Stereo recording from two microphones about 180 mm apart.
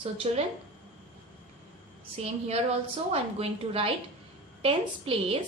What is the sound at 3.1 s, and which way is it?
A woman's voice, 35° right (ahead or behind).